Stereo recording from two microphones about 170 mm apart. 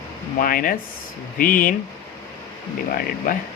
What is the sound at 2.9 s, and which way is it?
Speech, 55° left (ahead or behind).